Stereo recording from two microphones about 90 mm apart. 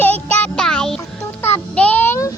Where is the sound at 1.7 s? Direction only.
15° left (ahead or behind).